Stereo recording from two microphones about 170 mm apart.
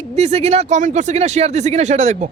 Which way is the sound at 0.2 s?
40° right (ahead or behind).